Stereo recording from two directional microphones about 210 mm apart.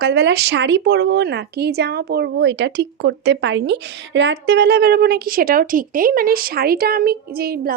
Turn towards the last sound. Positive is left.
turn(degrees=-45)  # may be behind; listen again after turning